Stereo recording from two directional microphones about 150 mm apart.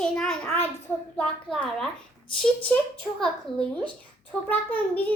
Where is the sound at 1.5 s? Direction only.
5° left (ahead or behind).